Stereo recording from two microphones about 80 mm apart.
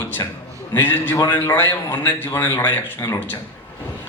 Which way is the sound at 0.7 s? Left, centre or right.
Left.